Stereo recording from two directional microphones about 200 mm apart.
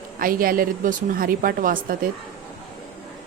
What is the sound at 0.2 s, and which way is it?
A woman's voice, 45° right (ahead or behind).